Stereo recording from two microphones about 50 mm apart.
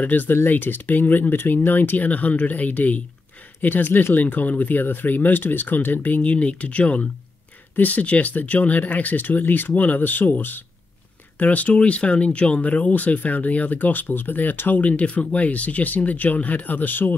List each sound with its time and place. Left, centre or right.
0.0 s speech: left